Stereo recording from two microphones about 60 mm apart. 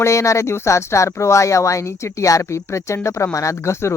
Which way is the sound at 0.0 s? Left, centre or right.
Left.